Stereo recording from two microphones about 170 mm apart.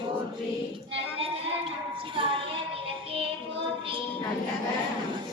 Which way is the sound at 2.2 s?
30° right (ahead or behind).